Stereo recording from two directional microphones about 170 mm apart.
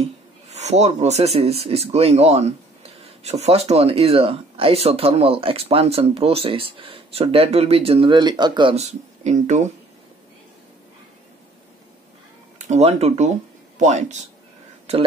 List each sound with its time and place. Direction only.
0.0 s speech: 40° right (ahead or behind)
9.2 s speech: 45° right (ahead or behind)
12.5 s speech: 45° right (ahead or behind)